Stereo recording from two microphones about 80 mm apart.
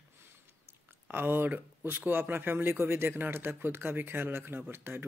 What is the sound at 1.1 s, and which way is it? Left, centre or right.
Speech, right.